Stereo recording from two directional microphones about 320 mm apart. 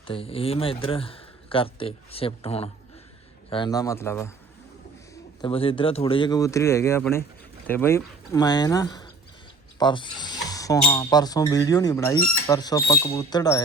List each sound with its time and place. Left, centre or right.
0.1 s pulleys: centre
5.4 s pulleys: centre